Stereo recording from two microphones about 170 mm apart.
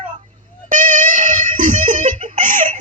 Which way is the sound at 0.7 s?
50° right (ahead or behind).